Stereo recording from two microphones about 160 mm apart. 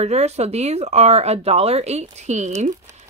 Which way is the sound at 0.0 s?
45° right (ahead or behind).